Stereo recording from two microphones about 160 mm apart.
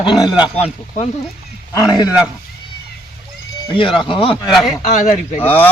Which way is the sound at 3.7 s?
30° left (ahead or behind).